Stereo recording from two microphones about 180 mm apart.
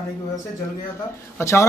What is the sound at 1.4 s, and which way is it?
Speech, 15° left (ahead or behind).